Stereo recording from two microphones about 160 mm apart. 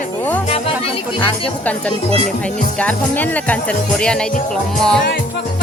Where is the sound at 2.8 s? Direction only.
10° left (ahead or behind).